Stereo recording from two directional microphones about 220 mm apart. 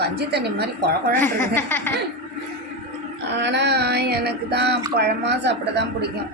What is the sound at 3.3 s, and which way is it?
A woman's voice, 50° right (ahead or behind).